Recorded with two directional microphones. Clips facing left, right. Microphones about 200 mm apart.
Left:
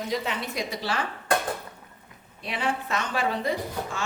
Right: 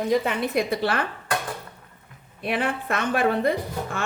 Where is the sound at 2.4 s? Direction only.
55° right (ahead or behind).